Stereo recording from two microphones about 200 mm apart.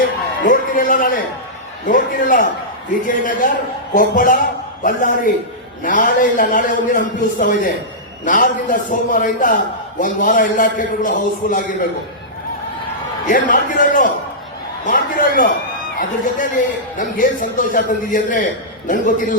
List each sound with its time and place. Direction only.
0.4 s a man's voice: 40° left (ahead or behind)
13.2 s a man's voice: 40° left (ahead or behind)